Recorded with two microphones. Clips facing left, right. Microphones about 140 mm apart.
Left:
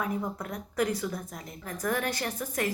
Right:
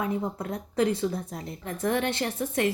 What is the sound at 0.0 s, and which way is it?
A woman's voice, 25° right (ahead or behind).